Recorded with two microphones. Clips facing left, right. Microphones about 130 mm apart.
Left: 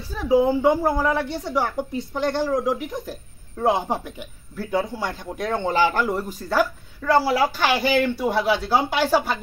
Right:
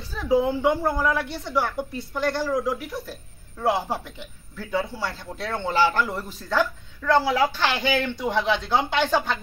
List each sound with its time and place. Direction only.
0.1 s a man's voice: 10° left (ahead or behind)